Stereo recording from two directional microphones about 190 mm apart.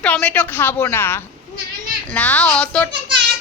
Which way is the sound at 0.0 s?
5° left (ahead or behind).